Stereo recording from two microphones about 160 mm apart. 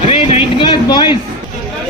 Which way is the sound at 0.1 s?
35° left (ahead or behind).